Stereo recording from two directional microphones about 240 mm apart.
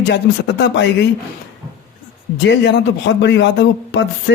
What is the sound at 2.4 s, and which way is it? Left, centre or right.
A man's voice, left.